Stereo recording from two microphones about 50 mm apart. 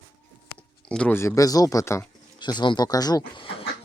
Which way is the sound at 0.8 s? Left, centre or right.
Left.